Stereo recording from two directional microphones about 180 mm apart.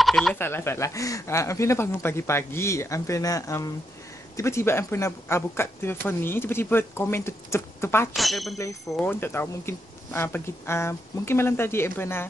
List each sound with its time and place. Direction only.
0.0 s speech: centre (ahead or behind)
0.4 s a woman's voice: 15° left (ahead or behind)
8.1 s a woman's voice: centre (ahead or behind)